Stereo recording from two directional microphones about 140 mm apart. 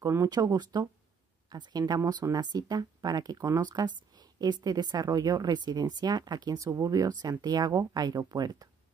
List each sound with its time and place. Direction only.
0.0 s a woman's voice: 25° right (ahead or behind)